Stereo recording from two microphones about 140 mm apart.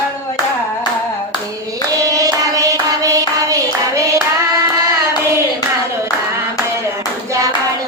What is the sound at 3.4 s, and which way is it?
Clapping, 25° right (ahead or behind).